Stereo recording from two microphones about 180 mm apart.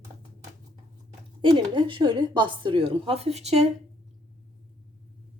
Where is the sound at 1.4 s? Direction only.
25° right (ahead or behind).